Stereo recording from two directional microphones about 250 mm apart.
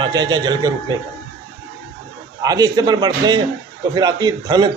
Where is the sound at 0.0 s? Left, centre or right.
Centre.